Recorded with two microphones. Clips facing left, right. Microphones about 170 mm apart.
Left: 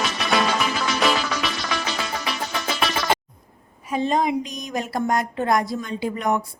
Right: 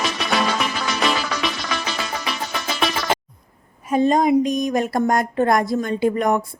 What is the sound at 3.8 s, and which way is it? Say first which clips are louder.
Speech: right 5 dB; 50° right (ahead or behind).